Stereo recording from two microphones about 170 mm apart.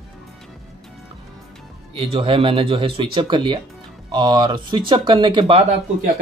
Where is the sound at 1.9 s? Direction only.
30° right (ahead or behind).